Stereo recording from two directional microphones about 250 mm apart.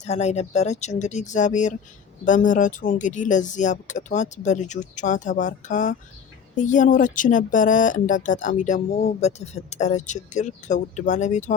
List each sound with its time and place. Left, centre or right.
0.0 s speech: left